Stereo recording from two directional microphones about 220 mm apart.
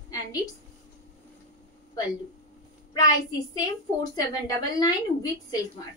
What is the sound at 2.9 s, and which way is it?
A woman's voice, 15° left (ahead or behind).